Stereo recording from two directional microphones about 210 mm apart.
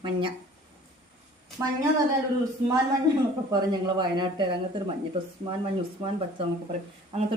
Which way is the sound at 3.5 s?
20° right (ahead or behind).